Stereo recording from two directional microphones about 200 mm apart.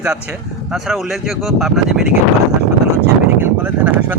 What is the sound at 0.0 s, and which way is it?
Speech, 5° right (ahead or behind).